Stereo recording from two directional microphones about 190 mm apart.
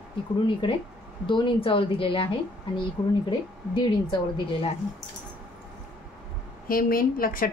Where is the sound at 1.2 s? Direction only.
25° left (ahead or behind).